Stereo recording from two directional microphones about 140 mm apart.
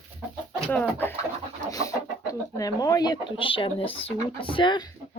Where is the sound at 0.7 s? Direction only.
10° left (ahead or behind).